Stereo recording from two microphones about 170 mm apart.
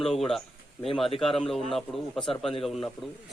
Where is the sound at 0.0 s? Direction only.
Centre (ahead or behind).